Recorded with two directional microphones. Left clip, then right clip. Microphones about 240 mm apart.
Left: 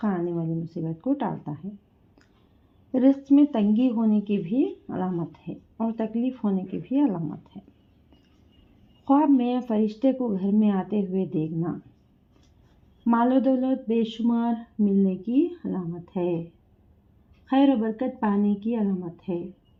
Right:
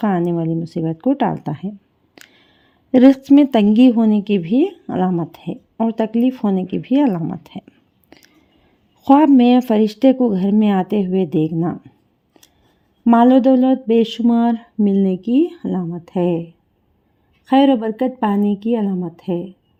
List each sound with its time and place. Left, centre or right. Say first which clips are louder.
0.0 s speech: right 9 dB; right
2.2 s a sound: right 17 dB; right
2.9 s speech: right 9 dB; right
9.0 s speech: right 10 dB; right
13.1 s speech: right 10 dB; right
17.4 s a woman's voice: right 8 dB; right